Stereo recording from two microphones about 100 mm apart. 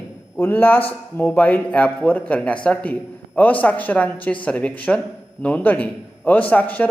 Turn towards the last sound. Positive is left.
turn(degrees=15)  # may be behind; listen again after turning